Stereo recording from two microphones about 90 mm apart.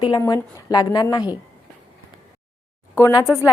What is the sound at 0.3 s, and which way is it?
Speech, 45° left (ahead or behind).